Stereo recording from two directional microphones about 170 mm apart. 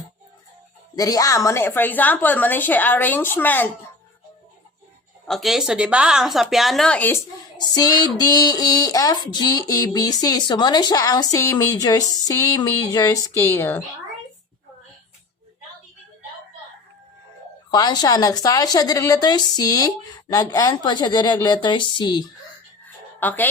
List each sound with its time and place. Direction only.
0.9 s a woman's voice: 20° left (ahead or behind)
5.2 s a woman's voice: centre (ahead or behind)
7.7 s a woman's voice: 25° left (ahead or behind)
17.7 s speech: 25° left (ahead or behind)
23.2 s a woman's voice: 10° left (ahead or behind)